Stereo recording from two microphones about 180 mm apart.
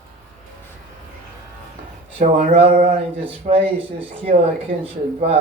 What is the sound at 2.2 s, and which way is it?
Speech, 35° right (ahead or behind).